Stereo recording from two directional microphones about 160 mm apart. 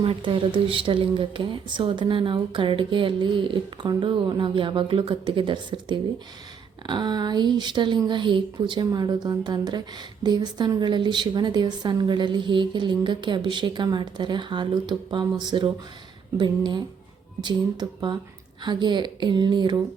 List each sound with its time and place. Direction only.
0.0 s a woman's voice: 35° right (ahead or behind)